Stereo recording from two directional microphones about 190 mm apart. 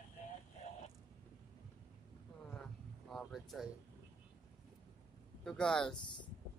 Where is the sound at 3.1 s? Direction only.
Centre (ahead or behind).